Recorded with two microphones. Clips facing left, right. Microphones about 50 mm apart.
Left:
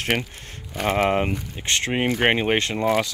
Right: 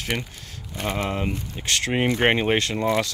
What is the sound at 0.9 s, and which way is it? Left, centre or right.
Speech, left.